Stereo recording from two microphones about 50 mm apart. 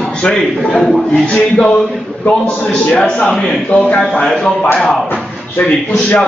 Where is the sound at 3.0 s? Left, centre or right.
Centre.